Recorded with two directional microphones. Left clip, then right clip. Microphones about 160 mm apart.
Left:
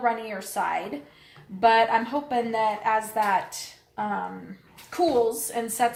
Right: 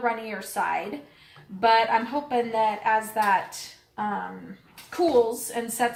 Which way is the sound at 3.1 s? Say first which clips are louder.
Right 1 dB; 25° left (ahead or behind).